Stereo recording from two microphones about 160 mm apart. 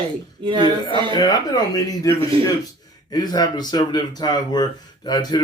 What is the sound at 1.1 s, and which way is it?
Speech, 25° left (ahead or behind).